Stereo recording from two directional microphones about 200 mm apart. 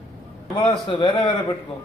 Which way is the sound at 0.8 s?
25° left (ahead or behind).